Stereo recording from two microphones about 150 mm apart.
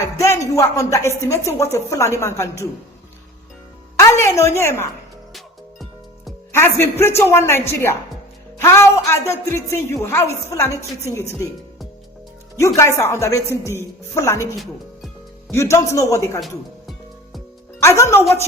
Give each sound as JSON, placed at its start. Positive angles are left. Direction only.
{"t": 0.0, "sound": "a woman's voice", "side_deg": 15}
{"t": 3.9, "sound": "a woman's voice", "side_deg": 20}
{"t": 6.5, "sound": "a woman's voice", "side_deg": 15}
{"t": 12.5, "sound": "a woman's voice", "side_deg": 20}
{"t": 14.6, "sound": "music", "side_deg": 0}
{"t": 15.5, "sound": "a woman's voice", "side_deg": 20}
{"t": 17.7, "sound": "speech", "side_deg": 20}